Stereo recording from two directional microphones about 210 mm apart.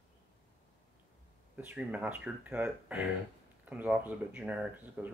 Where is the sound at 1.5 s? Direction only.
5° right (ahead or behind).